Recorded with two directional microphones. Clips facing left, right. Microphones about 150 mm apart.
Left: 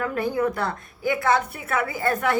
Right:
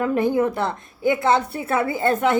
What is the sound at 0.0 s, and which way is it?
A woman's voice, 20° right (ahead or behind).